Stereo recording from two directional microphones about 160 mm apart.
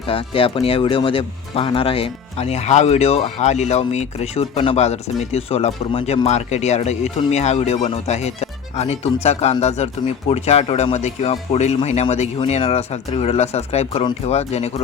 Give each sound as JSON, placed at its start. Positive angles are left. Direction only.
{"t": 0.1, "sound": "speech", "side_deg": 35}